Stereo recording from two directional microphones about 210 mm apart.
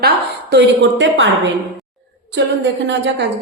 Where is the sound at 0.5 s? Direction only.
60° right (ahead or behind).